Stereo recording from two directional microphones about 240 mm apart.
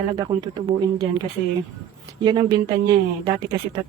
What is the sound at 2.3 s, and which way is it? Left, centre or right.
Speech, right.